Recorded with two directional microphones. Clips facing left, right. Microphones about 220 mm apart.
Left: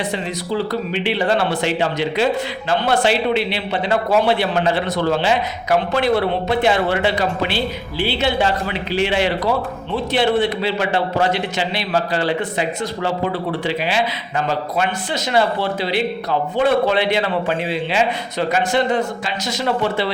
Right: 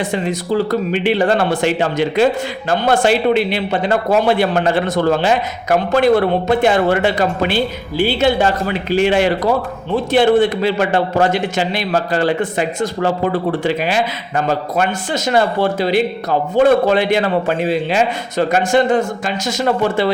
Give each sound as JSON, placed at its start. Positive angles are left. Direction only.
{"t": 0.1, "sound": "speech", "side_deg": -50}